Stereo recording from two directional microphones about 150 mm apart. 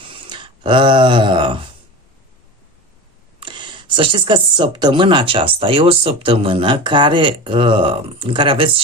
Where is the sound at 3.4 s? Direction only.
30° right (ahead or behind).